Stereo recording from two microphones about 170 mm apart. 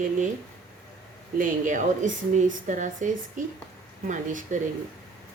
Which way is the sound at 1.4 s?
50° right (ahead or behind).